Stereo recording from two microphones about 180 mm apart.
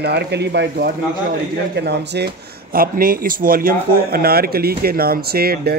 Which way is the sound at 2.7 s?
55° right (ahead or behind).